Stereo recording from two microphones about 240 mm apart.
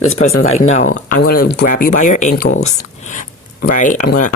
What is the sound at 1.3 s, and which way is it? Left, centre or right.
Speech, left.